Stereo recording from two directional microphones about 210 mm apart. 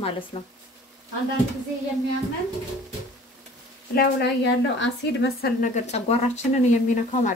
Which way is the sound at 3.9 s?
55° left (ahead or behind).